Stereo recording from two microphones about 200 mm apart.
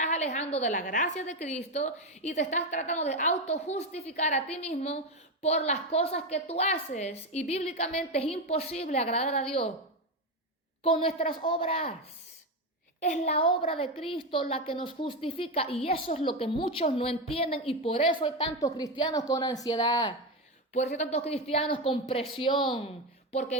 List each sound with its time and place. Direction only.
0.0 s a sound: 35° left (ahead or behind)
0.3 s a woman's voice: 35° left (ahead or behind)
10.8 s a woman's voice: 30° left (ahead or behind)
13.0 s a woman's voice: 35° left (ahead or behind)
20.7 s a woman's voice: 35° left (ahead or behind)